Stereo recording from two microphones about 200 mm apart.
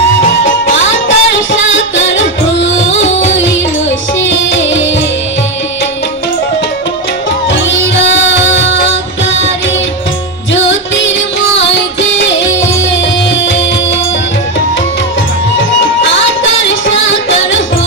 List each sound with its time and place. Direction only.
1.0 s music: 70° left (ahead or behind)
2.9 s music: 30° left (ahead or behind)
4.2 s music: 65° left (ahead or behind)
7.5 s music: 65° left (ahead or behind)
10.5 s music: 65° left (ahead or behind)
16.6 s music: 65° left (ahead or behind)